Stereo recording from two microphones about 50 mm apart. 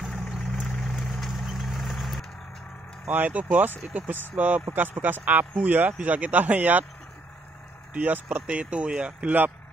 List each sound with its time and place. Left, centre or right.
0.0 s vehicle: centre
3.1 s speech: right
7.9 s speech: right